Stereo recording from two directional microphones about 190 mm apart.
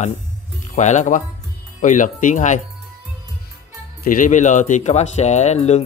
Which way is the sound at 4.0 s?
45° left (ahead or behind).